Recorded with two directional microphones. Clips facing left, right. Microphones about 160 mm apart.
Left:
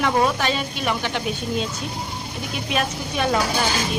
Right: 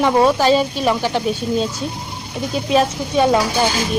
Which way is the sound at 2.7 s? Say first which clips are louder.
Right 9 dB; 30° right (ahead or behind).